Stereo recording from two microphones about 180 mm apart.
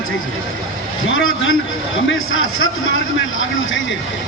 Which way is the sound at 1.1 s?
90° left.